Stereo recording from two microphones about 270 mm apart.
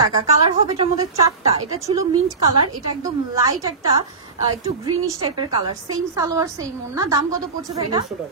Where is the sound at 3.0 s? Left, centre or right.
Centre.